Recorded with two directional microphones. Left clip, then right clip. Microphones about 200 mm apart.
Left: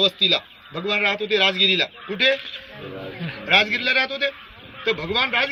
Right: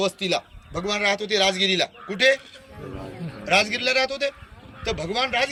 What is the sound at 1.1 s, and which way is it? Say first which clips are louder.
Speech: left 2 dB; 30° right (ahead or behind).